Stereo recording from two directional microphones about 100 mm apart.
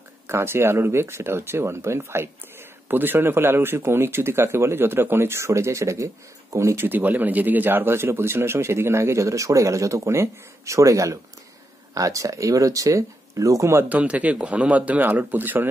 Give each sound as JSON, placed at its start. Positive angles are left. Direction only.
{"t": 0.3, "sound": "a man's voice", "side_deg": -25}
{"t": 6.9, "sound": "a man's voice", "side_deg": -20}
{"t": 13.8, "sound": "speech", "side_deg": -15}